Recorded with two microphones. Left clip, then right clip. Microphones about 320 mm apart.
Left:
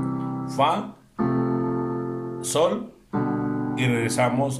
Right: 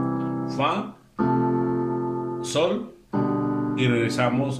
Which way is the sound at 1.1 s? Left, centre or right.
Centre.